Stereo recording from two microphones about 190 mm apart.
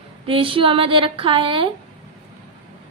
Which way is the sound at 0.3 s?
30° right (ahead or behind).